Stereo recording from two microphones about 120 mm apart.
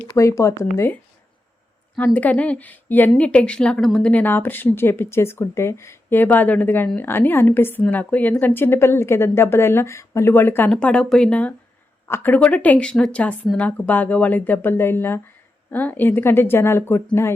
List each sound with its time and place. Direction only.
0.1 s a woman's voice: 25° left (ahead or behind)
2.1 s a woman's voice: 10° left (ahead or behind)